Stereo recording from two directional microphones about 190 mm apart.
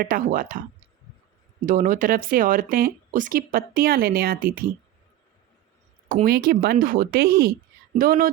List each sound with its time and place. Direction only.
0.0 s speech: 45° right (ahead or behind)
1.6 s speech: 45° right (ahead or behind)
6.1 s speech: 50° right (ahead or behind)